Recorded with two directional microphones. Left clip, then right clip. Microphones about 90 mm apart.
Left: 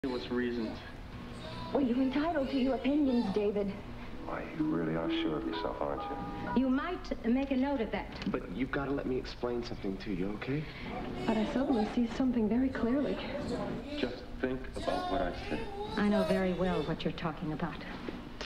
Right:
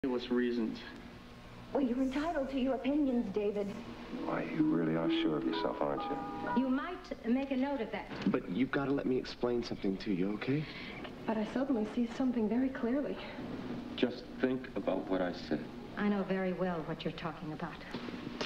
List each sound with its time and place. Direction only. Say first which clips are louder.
0.0 s speech: right 1 dB; 35° right (ahead or behind)
1.7 s speech: left 2 dB; 35° right (ahead or behind)